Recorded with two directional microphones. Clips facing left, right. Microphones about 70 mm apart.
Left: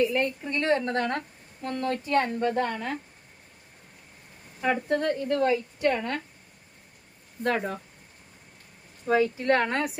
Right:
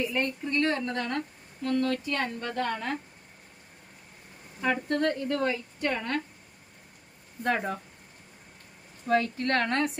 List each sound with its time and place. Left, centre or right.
0.0 s a woman's voice: centre
0.4 s a woman's voice: centre
1.6 s speech: left
2.4 s a woman's voice: centre
4.6 s a woman's voice: centre
7.4 s speech: centre
9.0 s a woman's voice: centre